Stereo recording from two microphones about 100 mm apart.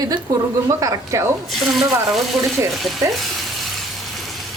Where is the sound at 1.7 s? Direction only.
Centre (ahead or behind).